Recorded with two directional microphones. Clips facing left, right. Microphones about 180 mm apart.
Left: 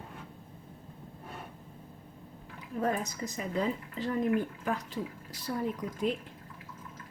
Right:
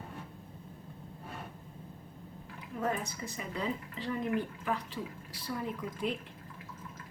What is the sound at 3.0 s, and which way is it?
A woman's voice, 40° left (ahead or behind).